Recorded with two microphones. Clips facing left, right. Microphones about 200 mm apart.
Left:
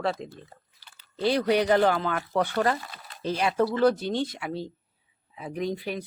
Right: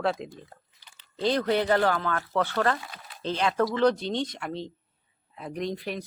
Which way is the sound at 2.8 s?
Centre (ahead or behind).